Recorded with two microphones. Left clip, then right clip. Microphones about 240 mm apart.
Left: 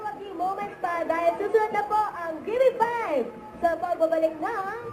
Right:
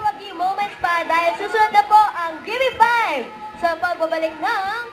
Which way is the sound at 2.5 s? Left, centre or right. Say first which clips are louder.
Right 6 dB; centre.